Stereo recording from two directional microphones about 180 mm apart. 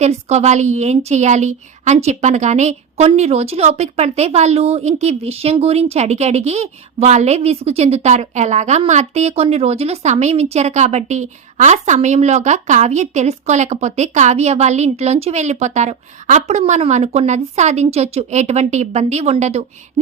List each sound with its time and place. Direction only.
0.0 s a woman's voice: 40° right (ahead or behind)